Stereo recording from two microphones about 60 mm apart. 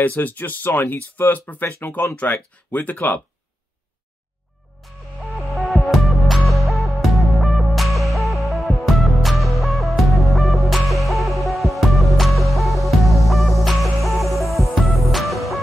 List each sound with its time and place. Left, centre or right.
0.0 s speech: left
5.5 s music: centre